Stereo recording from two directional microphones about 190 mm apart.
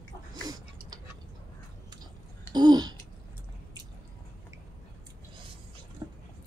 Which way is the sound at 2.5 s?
20° right (ahead or behind).